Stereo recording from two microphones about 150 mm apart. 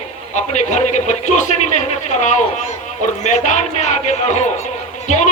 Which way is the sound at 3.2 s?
50° left (ahead or behind).